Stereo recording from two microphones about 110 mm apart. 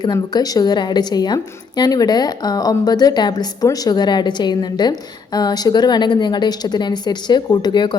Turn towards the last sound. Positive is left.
turn(degrees=40)  # may be behind; listen again after turning